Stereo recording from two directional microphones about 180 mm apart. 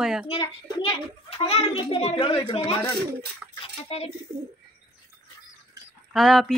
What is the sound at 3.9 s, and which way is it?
Speech, 35° left (ahead or behind).